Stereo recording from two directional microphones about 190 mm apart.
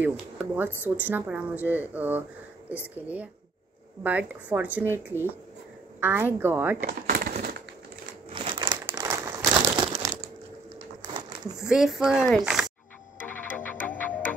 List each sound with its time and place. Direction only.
0.0 s speech: 10° right (ahead or behind)
6.9 s a sound: 55° right (ahead or behind)
8.3 s crumpling: 25° right (ahead or behind)
8.8 s crumpling: 15° right (ahead or behind)
11.5 s speech: centre (ahead or behind)
13.2 s music: 10° left (ahead or behind)